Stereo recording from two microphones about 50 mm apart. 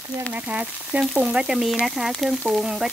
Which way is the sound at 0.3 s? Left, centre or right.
Right.